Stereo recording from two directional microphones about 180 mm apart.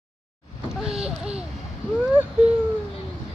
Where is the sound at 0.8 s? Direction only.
5° right (ahead or behind).